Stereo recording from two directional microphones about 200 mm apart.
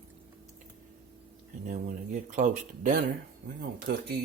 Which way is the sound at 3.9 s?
55° right (ahead or behind).